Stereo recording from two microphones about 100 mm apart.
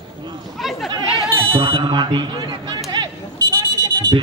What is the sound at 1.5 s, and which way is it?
Music, 65° right (ahead or behind).